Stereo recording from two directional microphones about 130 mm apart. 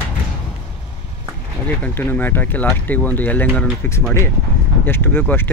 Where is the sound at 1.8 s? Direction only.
15° left (ahead or behind).